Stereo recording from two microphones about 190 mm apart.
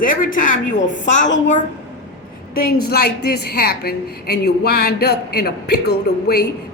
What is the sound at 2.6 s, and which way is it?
A woman's voice, 55° left (ahead or behind).